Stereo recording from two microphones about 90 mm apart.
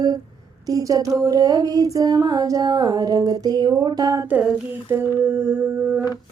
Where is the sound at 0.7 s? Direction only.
40° right (ahead or behind).